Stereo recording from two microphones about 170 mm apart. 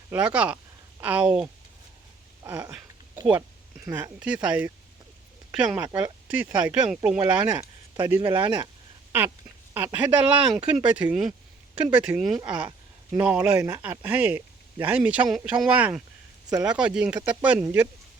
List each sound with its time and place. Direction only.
0.1 s speech: 5° right (ahead or behind)
3.8 s speech: 10° right (ahead or behind)
8.4 s speech: 25° right (ahead or behind)
9.7 s speech: 10° right (ahead or behind)